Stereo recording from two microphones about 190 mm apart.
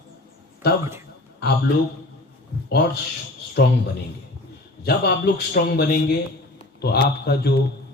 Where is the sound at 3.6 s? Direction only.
55° left (ahead or behind).